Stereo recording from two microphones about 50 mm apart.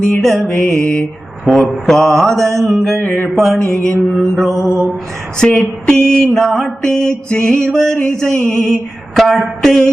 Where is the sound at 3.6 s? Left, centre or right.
Centre.